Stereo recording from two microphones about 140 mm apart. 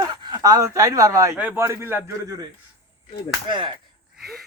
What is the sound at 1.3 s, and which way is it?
Speech, 15° right (ahead or behind).